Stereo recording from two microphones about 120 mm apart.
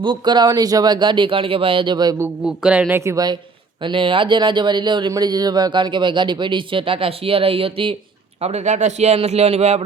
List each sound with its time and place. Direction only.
0.0 s speech: 40° right (ahead or behind)
2.6 s speech: 10° right (ahead or behind)
3.0 s a woman's voice: 30° right (ahead or behind)
3.8 s speech: 45° right (ahead or behind)
8.4 s a man's voice: 65° right (ahead or behind)